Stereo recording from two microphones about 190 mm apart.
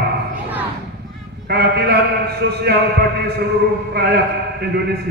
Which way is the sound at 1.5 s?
60° right (ahead or behind).